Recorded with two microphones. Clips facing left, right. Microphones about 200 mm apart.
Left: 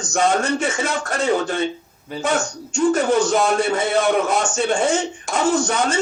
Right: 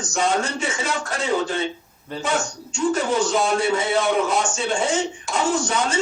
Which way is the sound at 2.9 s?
55° left (ahead or behind).